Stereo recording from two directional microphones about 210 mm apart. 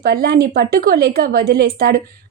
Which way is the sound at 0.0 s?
50° right (ahead or behind).